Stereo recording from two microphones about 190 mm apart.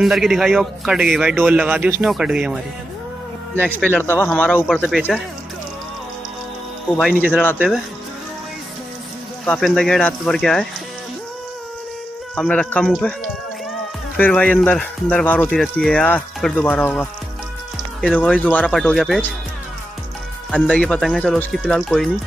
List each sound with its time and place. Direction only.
0.0 s a man's voice: centre (ahead or behind)
3.5 s a man's voice: 10° left (ahead or behind)
7.0 s a man's voice: 5° right (ahead or behind)
9.5 s a man's voice: 5° left (ahead or behind)
12.4 s a man's voice: 5° left (ahead or behind)
14.1 s speech: 5° left (ahead or behind)
18.2 s speech: 5° left (ahead or behind)
20.5 s a man's voice: 5° left (ahead or behind)